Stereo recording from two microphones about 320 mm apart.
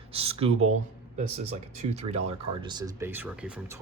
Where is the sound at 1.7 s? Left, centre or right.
Right.